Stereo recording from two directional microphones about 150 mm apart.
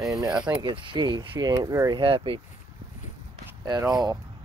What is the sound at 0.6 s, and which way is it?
Speech, 30° right (ahead or behind).